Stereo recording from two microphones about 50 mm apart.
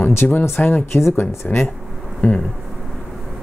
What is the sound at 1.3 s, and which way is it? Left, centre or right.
Speech, left.